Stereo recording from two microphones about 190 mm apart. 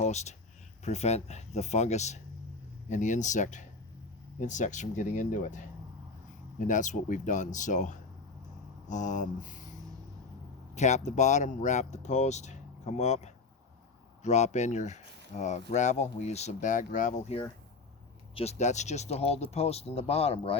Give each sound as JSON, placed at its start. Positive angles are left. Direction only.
{"t": 0.0, "sound": "speech", "side_deg": 35}
{"t": 10.8, "sound": "speech", "side_deg": 40}